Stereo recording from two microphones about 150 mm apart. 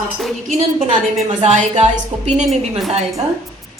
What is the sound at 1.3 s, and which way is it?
A woman's voice, 50° right (ahead or behind).